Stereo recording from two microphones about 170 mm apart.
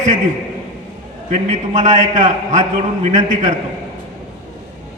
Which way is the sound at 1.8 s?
45° right (ahead or behind).